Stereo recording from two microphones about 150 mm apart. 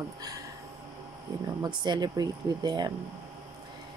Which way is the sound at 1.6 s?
30° right (ahead or behind).